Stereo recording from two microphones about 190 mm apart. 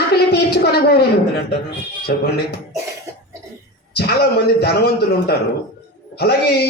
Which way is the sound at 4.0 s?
60° left (ahead or behind).